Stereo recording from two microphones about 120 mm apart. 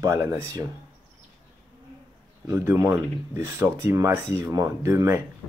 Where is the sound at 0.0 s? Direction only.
25° right (ahead or behind).